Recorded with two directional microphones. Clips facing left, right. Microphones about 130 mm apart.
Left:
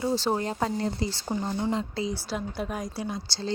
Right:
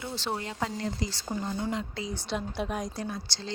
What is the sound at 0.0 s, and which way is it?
Speech, 40° left (ahead or behind).